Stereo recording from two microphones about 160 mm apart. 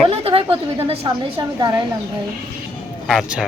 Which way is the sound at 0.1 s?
35° right (ahead or behind).